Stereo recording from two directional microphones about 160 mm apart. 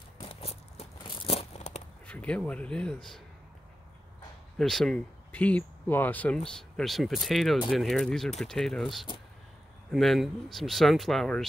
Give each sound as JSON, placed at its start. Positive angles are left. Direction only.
{"t": 0.2, "sound": "a sound", "side_deg": 35}
{"t": 2.0, "sound": "speech", "side_deg": 5}
{"t": 4.6, "sound": "speech", "side_deg": 0}